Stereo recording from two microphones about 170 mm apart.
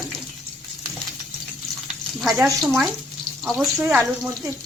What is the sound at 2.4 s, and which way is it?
Speech, centre (ahead or behind).